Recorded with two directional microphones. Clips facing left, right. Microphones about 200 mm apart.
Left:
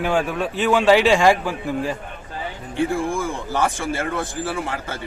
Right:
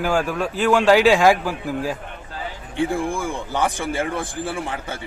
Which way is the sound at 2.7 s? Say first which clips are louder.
Left 1 dB; 15° right (ahead or behind).